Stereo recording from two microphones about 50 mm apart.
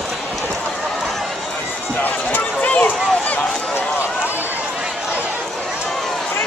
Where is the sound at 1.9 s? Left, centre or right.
Left.